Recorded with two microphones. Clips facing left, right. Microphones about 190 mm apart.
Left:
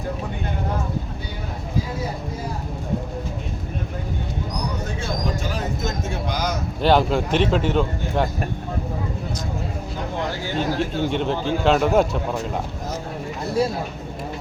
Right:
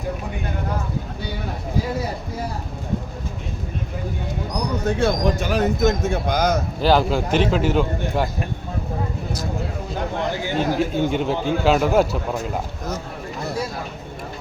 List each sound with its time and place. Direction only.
4.9 s speech: 65° right (ahead or behind)
6.8 s a man's voice: centre (ahead or behind)
10.8 s a man's voice: 5° right (ahead or behind)